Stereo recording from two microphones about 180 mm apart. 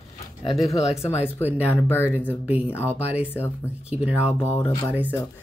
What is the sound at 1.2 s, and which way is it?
Speech, 10° right (ahead or behind).